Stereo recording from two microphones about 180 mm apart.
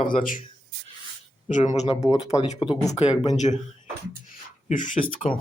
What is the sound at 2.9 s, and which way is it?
Speech, 40° left (ahead or behind).